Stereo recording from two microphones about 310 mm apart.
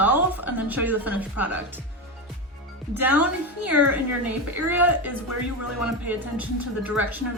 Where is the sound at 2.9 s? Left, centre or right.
Centre.